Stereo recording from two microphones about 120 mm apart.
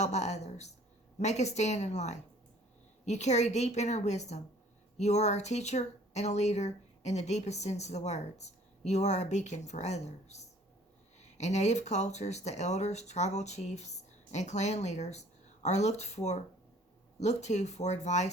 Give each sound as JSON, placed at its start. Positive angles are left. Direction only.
{"t": 0.0, "sound": "speech", "side_deg": 70}